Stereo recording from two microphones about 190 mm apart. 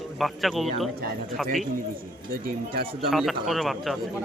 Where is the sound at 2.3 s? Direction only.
50° right (ahead or behind).